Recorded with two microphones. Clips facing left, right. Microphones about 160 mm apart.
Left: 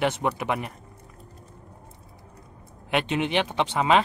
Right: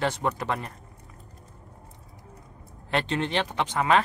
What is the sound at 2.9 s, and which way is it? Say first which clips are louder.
Speech: left 2 dB; 15° left (ahead or behind).